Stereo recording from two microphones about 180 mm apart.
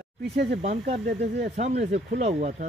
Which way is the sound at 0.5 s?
40° right (ahead or behind).